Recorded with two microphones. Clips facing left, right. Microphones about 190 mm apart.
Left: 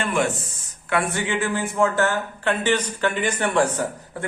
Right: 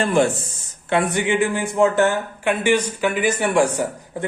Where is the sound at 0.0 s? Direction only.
30° right (ahead or behind).